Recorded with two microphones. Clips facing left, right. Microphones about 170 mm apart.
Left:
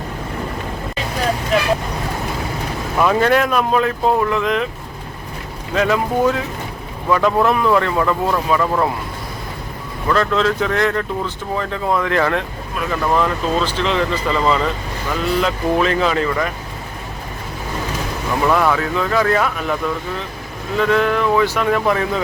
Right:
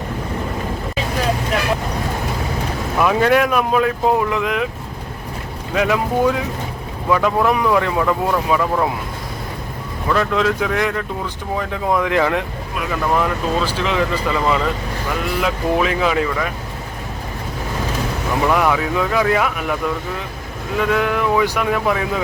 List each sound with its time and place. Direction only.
3.0 s speech: 5° right (ahead or behind)
5.7 s speech: 10° right (ahead or behind)
10.1 s speech: 10° right (ahead or behind)
18.4 s speech: 10° right (ahead or behind)
20.7 s speech: 10° right (ahead or behind)